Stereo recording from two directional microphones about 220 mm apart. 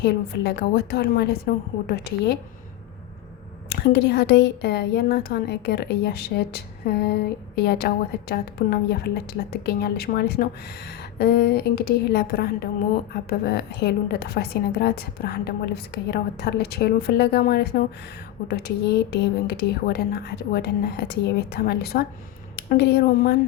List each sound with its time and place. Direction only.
0.0 s a woman's voice: 50° left (ahead or behind)
3.8 s a woman's voice: 50° left (ahead or behind)